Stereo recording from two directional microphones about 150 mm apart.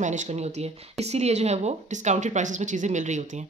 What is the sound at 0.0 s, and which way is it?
Speech, 55° right (ahead or behind).